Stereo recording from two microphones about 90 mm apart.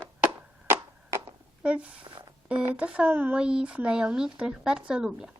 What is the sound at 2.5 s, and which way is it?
Speech, 15° right (ahead or behind).